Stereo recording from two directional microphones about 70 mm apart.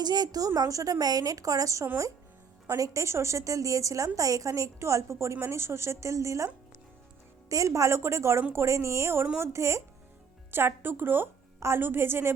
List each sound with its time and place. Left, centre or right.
0.0 s a woman's voice: right
7.5 s a woman's voice: right